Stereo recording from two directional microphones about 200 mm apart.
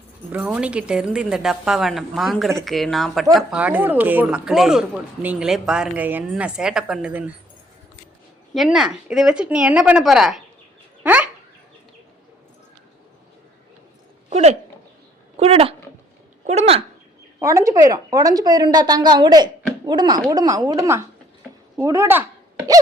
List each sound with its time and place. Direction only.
0.3 s speech: 5° right (ahead or behind)
8.5 s speech: centre (ahead or behind)
14.3 s speech: 30° right (ahead or behind)
17.4 s a woman's voice: 15° right (ahead or behind)